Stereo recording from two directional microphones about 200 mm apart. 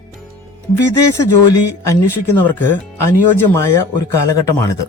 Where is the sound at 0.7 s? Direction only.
15° left (ahead or behind).